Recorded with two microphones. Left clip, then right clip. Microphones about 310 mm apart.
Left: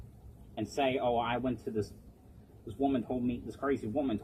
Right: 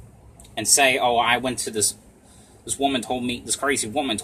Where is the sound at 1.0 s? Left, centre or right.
Right.